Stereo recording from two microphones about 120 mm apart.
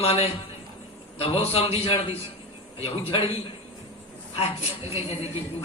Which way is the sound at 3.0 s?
50° left (ahead or behind).